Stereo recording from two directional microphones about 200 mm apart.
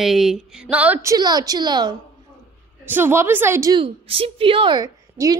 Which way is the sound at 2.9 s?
10° right (ahead or behind).